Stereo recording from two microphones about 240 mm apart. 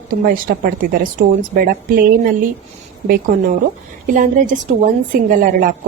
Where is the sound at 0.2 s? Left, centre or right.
Right.